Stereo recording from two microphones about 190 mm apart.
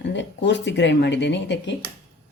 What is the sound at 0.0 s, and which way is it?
Speech, 70° left (ahead or behind).